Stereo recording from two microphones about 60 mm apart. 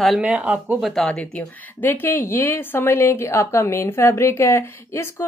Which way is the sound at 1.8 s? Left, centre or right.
Left.